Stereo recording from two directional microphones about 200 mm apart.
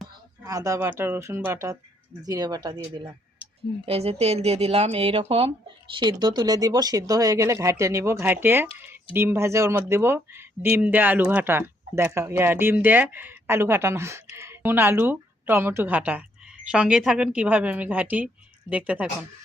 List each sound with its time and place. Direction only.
0.4 s a woman's voice: 15° right (ahead or behind)